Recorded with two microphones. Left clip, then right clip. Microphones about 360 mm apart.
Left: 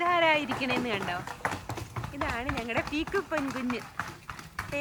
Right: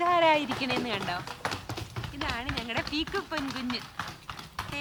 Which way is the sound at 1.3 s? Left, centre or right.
Left.